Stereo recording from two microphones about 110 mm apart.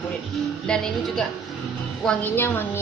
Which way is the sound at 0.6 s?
5° left (ahead or behind).